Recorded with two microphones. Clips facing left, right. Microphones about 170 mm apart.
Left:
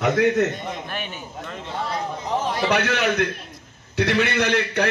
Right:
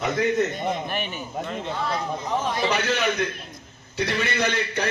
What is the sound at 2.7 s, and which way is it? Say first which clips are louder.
A man's voice: left 4 dB; 65° left (ahead or behind).